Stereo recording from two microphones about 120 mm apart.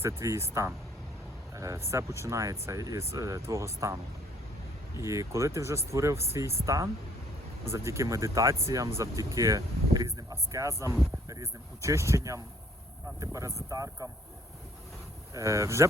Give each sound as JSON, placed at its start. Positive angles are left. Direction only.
{"t": 0.0, "sound": "speech", "side_deg": -25}
{"t": 1.5, "sound": "speech", "side_deg": -25}
{"t": 5.0, "sound": "speech", "side_deg": -25}
{"t": 15.3, "sound": "speech", "side_deg": -25}